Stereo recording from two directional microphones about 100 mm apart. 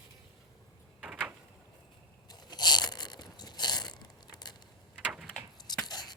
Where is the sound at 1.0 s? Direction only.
10° right (ahead or behind).